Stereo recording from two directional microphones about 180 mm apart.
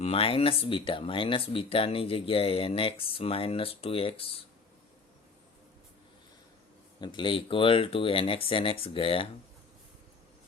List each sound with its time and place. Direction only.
0.0 s speech: 30° left (ahead or behind)
7.0 s speech: 25° left (ahead or behind)